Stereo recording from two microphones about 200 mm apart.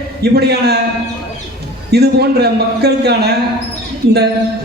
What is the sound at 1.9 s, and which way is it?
A man's voice, 55° right (ahead or behind).